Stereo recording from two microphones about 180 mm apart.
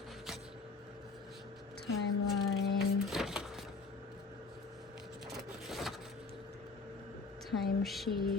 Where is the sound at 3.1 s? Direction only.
Centre (ahead or behind).